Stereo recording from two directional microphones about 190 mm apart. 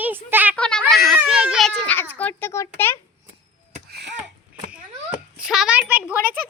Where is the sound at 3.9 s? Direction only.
60° right (ahead or behind).